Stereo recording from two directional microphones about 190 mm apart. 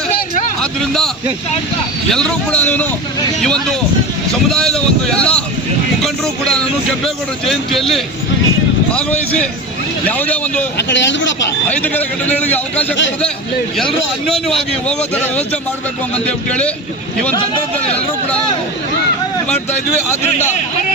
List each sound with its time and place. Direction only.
0.6 s a man's voice: centre (ahead or behind)
4.4 s boat: 5° left (ahead or behind)
6.0 s vehicle: 5° left (ahead or behind)
8.9 s a man's voice: 5° left (ahead or behind)
10.8 s speech: 70° left (ahead or behind)
11.7 s a man's voice: 10° left (ahead or behind)
14.3 s a man's voice: centre (ahead or behind)
16.5 s a man's voice: 5° left (ahead or behind)
19.5 s a man's voice: 10° left (ahead or behind)